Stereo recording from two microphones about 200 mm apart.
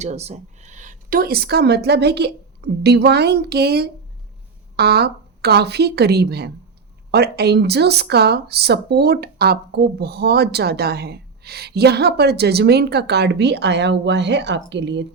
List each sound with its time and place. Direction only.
0.0 s a woman's voice: 35° right (ahead or behind); by 15.0 s 60° right (ahead or behind)